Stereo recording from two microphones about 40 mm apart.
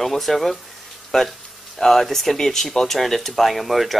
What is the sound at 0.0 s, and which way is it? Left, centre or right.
Speech, centre.